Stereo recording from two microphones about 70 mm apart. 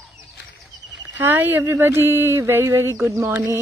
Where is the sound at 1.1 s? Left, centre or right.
Right.